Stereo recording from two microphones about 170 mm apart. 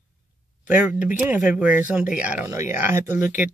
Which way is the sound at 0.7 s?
10° right (ahead or behind).